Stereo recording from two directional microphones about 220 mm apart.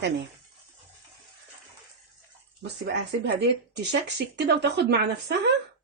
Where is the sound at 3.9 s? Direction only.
50° right (ahead or behind).